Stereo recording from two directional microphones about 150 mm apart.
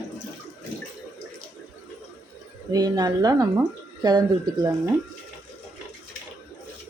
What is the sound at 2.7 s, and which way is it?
Speech, 25° right (ahead or behind).